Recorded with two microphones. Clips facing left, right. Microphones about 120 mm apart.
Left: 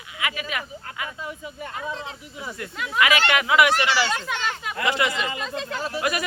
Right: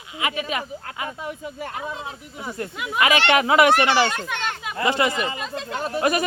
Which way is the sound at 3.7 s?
55° right (ahead or behind).